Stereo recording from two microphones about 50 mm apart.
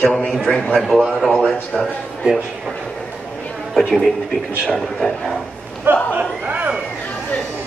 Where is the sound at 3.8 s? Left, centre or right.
Centre.